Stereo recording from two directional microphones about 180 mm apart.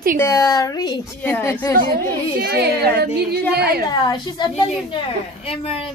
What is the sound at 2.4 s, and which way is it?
A child's voice, 60° right (ahead or behind).